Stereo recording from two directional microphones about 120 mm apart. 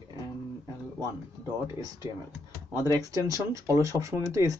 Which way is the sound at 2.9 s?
30° right (ahead or behind).